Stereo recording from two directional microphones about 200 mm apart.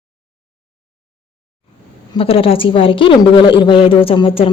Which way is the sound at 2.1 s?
25° left (ahead or behind).